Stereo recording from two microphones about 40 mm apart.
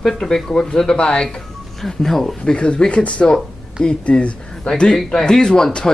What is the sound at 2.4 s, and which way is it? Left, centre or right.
Speech, left.